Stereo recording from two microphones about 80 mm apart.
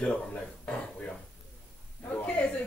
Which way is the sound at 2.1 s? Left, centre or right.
Centre.